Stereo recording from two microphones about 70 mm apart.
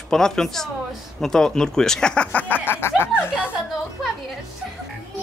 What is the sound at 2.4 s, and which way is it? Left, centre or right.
Speech, left.